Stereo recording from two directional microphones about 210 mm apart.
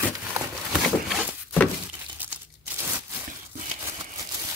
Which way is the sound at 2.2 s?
10° right (ahead or behind).